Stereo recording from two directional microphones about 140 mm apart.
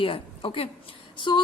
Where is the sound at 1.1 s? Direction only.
35° left (ahead or behind).